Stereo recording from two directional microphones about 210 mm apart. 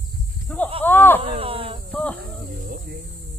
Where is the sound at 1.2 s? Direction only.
25° right (ahead or behind).